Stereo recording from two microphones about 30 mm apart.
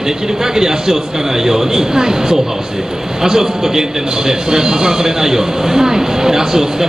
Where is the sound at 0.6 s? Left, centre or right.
Centre.